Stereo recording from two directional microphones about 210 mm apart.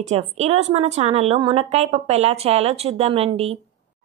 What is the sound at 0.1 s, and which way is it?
A woman's voice, 30° right (ahead or behind).